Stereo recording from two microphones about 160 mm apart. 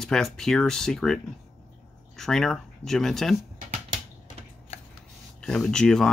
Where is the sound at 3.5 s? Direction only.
45° right (ahead or behind).